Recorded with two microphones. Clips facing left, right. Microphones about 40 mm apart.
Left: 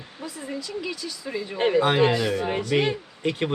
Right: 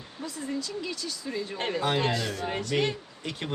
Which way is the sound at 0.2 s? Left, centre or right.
Centre.